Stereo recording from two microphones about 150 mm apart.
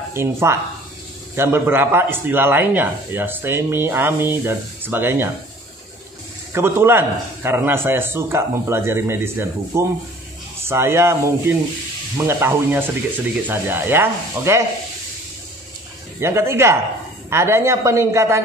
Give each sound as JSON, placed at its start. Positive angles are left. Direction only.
{"t": 0.1, "sound": "a man's voice", "side_deg": -15}
{"t": 6.5, "sound": "a man's voice", "side_deg": -15}
{"t": 16.2, "sound": "a man's voice", "side_deg": -15}